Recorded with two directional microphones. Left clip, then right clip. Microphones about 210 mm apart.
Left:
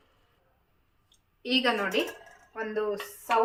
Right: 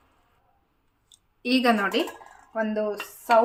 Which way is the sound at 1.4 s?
55° right (ahead or behind).